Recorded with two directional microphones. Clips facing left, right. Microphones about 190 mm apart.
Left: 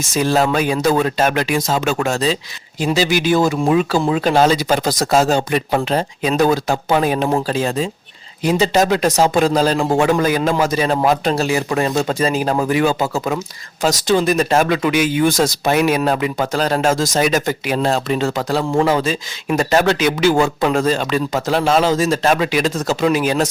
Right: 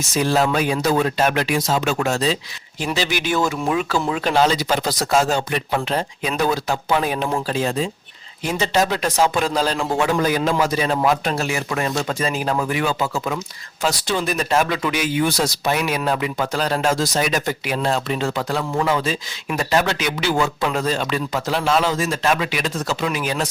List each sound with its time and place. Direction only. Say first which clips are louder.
0.2 s speech: left 3 dB; 40° left (ahead or behind)